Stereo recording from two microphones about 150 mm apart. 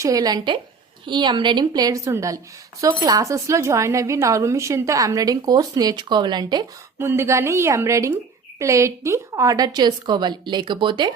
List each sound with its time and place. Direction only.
0.0 s speech: 25° right (ahead or behind)
7.0 s speech: 15° right (ahead or behind); by 11.1 s 30° right (ahead or behind)